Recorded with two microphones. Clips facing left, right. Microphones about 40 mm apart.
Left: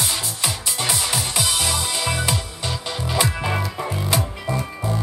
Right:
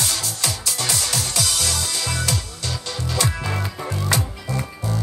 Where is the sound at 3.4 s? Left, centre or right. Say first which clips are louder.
Left 3 dB; centre.